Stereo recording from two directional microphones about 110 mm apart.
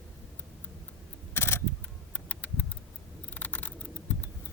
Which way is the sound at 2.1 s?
15° left (ahead or behind).